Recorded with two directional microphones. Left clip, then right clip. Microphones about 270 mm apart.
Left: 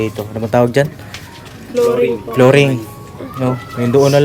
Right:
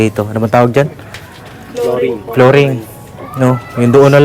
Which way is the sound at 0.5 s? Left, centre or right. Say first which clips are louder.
Right 3 dB; centre.